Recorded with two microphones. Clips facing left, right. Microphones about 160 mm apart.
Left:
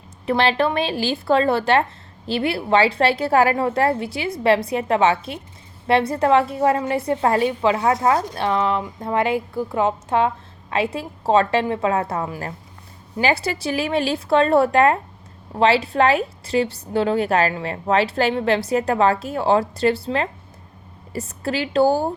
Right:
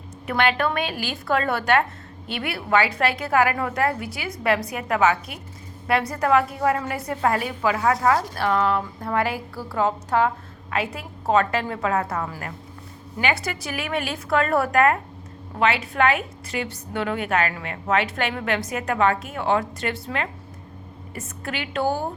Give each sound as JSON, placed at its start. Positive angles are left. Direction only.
{"t": 0.3, "sound": "a woman's voice", "side_deg": 30}